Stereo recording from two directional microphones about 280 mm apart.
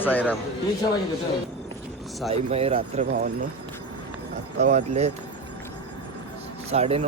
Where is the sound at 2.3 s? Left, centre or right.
Right.